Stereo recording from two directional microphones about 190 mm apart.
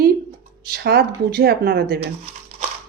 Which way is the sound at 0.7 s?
55° right (ahead or behind).